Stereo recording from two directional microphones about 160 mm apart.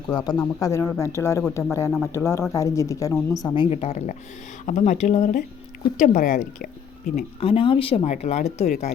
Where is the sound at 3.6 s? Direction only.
45° left (ahead or behind).